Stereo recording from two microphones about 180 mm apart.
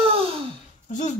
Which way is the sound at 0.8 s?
40° left (ahead or behind).